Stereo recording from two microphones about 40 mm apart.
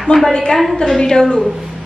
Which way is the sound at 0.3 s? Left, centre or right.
Left.